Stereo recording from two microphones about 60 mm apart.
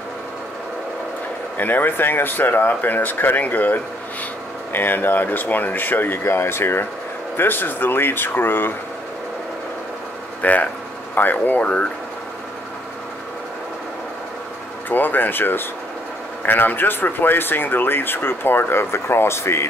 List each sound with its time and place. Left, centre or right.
1.6 s speech: left
10.4 s speech: left
14.9 s speech: left